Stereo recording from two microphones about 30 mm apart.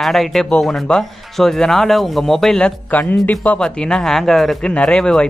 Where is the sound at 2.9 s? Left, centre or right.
Left.